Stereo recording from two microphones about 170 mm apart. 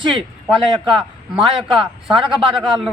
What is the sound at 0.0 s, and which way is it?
Speech, 30° right (ahead or behind).